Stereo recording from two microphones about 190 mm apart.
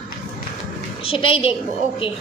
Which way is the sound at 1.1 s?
30° left (ahead or behind).